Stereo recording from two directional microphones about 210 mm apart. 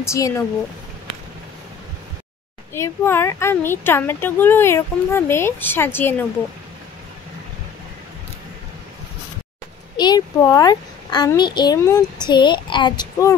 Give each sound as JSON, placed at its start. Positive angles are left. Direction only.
{"t": 0.0, "sound": "a woman's voice", "side_deg": 15}
{"t": 2.7, "sound": "a woman's voice", "side_deg": 10}
{"t": 9.9, "sound": "a child's voice", "side_deg": 20}